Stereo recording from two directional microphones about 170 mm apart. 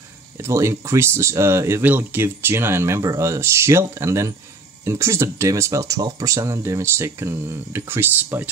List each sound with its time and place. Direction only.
0.4 s speech: 15° right (ahead or behind)